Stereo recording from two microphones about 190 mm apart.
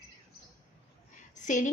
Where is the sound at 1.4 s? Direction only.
40° left (ahead or behind).